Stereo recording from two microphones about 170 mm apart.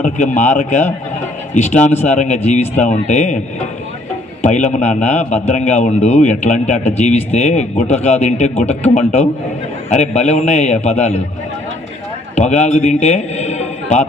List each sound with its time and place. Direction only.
0.3 s a man's voice: 45° left (ahead or behind)
12.4 s a man's voice: 40° left (ahead or behind)